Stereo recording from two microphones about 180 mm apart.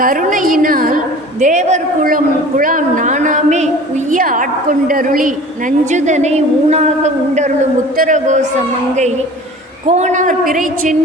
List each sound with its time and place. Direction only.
0.0 s a woman's voice: 50° right (ahead or behind)